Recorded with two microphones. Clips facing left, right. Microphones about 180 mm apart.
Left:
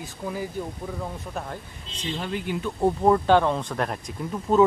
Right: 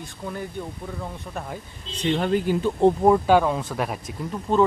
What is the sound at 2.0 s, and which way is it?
Speech, 65° right (ahead or behind).